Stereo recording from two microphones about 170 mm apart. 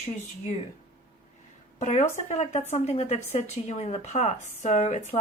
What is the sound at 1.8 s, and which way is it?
A woman's voice, 45° left (ahead or behind).